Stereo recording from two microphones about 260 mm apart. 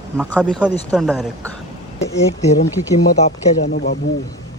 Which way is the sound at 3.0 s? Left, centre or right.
Left.